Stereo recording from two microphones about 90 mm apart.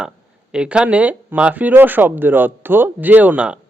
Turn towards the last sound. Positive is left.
turn(degrees=-15)  # may be behind; listen again after turning